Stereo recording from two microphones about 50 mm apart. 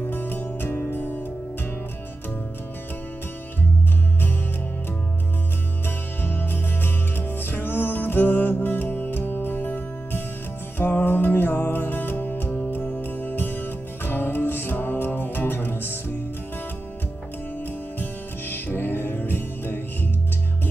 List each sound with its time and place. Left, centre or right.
0.0 s music: left
6.2 s music: left
18.5 s music: left